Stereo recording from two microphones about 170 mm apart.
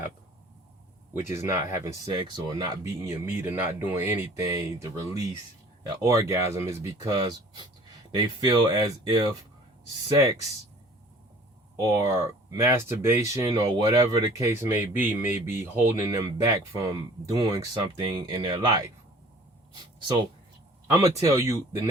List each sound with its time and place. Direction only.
1.3 s speech: 15° right (ahead or behind)
11.8 s speech: 20° right (ahead or behind)
19.7 s a sound: 25° right (ahead or behind)
20.9 s speech: 20° right (ahead or behind)